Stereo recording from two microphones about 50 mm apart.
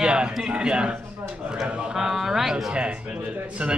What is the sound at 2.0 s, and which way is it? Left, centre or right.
Speech, centre.